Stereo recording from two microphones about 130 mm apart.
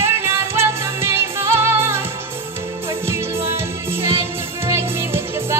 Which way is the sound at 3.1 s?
20° right (ahead or behind).